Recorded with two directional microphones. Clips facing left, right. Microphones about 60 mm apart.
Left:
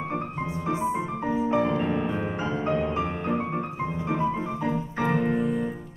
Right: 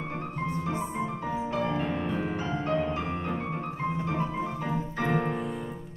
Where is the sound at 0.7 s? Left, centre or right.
Centre.